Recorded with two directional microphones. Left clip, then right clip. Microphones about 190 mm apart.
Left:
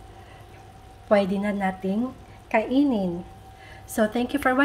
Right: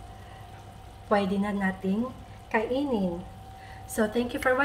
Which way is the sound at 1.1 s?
45° left (ahead or behind).